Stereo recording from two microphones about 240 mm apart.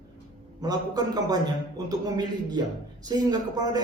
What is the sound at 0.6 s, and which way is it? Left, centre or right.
Speech, centre.